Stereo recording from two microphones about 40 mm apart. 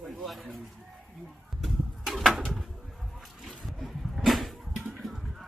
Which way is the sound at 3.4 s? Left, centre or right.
Centre.